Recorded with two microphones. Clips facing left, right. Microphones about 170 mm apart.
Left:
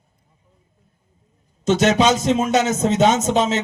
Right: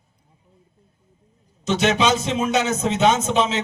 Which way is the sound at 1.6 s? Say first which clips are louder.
Left 4 dB; 45° left (ahead or behind).